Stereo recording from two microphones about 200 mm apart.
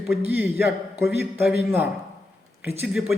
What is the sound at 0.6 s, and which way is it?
Speech, 50° left (ahead or behind).